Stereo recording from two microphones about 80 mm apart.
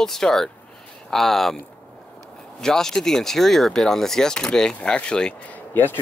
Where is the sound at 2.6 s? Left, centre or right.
Centre.